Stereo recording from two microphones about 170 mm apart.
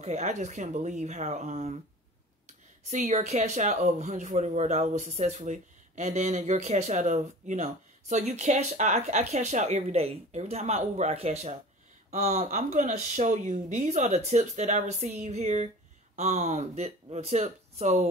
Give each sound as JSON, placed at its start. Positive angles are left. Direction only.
{"t": 0.0, "sound": "speech", "side_deg": -40}